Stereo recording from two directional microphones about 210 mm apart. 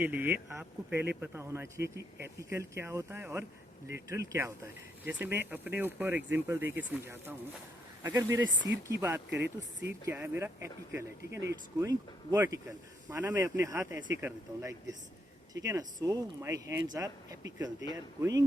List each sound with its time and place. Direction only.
0.0 s speech: 10° right (ahead or behind)
11.3 s speech: 55° right (ahead or behind)
11.8 s speech: 15° right (ahead or behind)